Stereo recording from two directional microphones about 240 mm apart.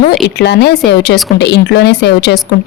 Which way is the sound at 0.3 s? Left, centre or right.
Left.